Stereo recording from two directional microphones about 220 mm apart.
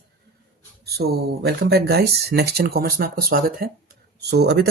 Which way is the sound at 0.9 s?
45° right (ahead or behind).